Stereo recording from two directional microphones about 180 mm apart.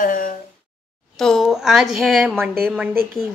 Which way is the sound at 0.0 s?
50° left (ahead or behind).